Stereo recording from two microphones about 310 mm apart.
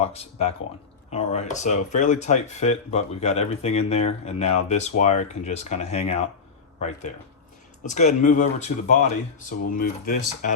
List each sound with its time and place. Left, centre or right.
0.0 s speech: centre